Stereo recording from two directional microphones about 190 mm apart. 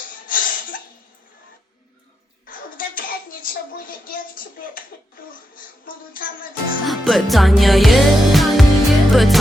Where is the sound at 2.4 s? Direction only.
50° left (ahead or behind).